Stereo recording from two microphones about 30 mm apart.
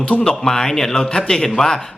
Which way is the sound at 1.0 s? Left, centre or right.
Left.